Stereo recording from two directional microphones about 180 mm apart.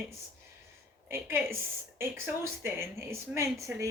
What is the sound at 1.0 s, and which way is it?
A woman's voice, 15° right (ahead or behind).